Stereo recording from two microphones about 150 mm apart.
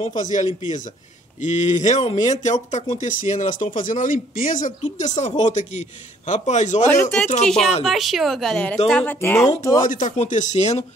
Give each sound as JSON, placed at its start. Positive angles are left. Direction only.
{"t": 0.0, "sound": "speech", "side_deg": 60}
{"t": 6.9, "sound": "speech", "side_deg": 10}
{"t": 9.8, "sound": "speech", "side_deg": 60}